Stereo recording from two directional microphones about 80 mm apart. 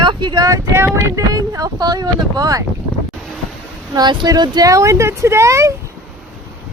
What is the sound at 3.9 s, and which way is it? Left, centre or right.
Speech, right.